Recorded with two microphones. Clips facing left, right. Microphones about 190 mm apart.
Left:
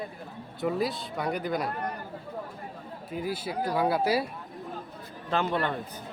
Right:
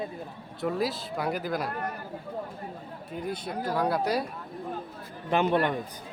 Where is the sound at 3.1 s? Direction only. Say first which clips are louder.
Left 1 dB; 5° left (ahead or behind).